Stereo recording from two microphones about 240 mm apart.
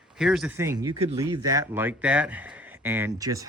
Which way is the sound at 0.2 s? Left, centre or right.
Centre.